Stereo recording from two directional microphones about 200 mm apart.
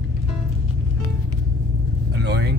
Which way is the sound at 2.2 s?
55° right (ahead or behind).